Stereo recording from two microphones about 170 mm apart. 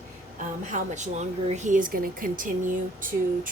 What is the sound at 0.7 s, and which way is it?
Speech, 45° right (ahead or behind).